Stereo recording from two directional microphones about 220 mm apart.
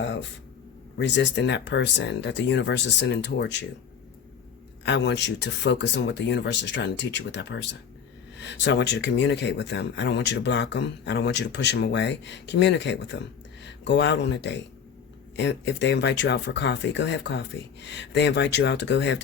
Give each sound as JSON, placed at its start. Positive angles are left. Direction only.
{"t": 0.0, "sound": "a sound", "side_deg": 55}
{"t": 0.9, "sound": "speech", "side_deg": 55}
{"t": 4.9, "sound": "speech", "side_deg": 50}